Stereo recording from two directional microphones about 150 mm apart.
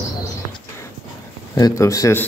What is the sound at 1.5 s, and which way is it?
Speech, 25° left (ahead or behind).